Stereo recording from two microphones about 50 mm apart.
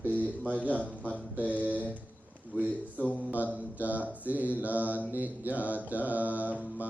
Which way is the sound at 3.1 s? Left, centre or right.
Right.